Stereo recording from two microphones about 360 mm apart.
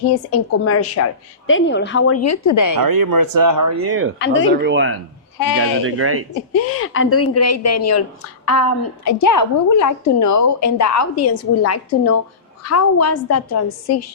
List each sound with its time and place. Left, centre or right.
0.3 s a woman's voice: left
2.8 s speech: right
6.5 s a woman's voice: left
9.1 s a woman's voice: left